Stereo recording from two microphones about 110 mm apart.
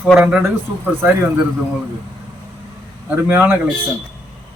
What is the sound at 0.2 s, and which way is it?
Speech, 10° right (ahead or behind).